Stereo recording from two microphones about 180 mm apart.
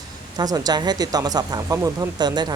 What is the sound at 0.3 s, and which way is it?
Speech, 20° right (ahead or behind).